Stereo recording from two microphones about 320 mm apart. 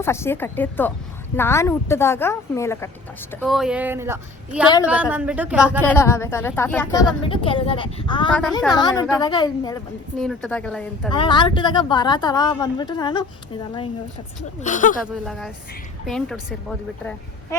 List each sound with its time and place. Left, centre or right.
0.0 s a woman's voice: centre
6.0 s speech: centre
8.3 s a woman's voice: centre
10.2 s a woman's voice: centre
11.1 s speech: centre
14.6 s speech: left
15.2 s a woman's voice: centre